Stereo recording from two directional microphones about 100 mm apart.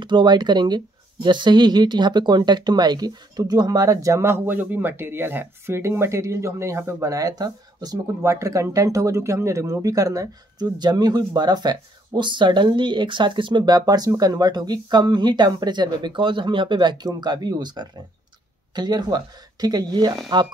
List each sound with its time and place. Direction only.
0.0 s speech: 50° right (ahead or behind)